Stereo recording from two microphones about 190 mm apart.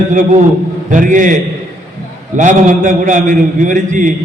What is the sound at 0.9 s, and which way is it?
A man's voice, 45° right (ahead or behind).